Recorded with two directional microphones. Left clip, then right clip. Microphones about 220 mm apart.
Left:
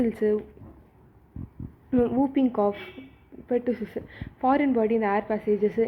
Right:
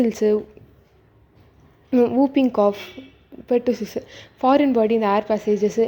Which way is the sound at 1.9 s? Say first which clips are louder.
Right 6 dB; 25° right (ahead or behind).